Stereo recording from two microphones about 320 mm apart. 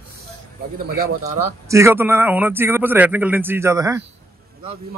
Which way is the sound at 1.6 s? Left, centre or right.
Centre.